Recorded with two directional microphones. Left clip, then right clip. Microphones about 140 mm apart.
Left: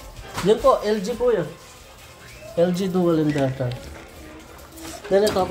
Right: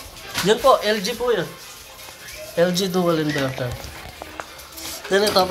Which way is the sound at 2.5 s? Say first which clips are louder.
Right 1 dB; 5° left (ahead or behind).